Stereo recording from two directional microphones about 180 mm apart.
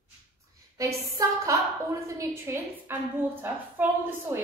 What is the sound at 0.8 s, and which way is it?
A woman's voice, 20° right (ahead or behind).